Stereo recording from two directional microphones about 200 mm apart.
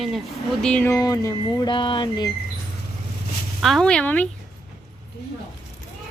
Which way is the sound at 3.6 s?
Centre (ahead or behind).